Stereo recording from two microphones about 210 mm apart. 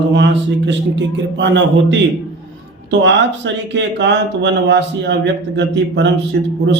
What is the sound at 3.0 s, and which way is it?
Speech, 60° right (ahead or behind).